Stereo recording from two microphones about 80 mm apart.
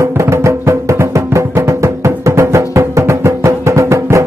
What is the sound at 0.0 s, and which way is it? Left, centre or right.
Music, right.